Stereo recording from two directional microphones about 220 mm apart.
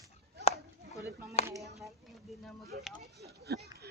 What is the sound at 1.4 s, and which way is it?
Speech, 30° left (ahead or behind).